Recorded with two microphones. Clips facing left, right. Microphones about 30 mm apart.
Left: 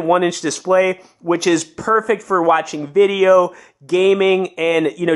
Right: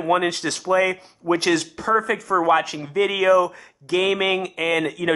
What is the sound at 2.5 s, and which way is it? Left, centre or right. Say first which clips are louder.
Speech: left 6 dB; right.